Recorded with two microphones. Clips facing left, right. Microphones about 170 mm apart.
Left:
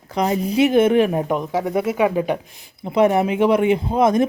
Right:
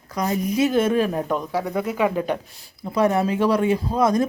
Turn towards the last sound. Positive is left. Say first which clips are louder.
# left 3 dB
turn(degrees=20)  # may be behind; listen again after turning